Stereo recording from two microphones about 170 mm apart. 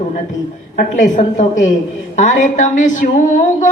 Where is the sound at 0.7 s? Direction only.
50° left (ahead or behind).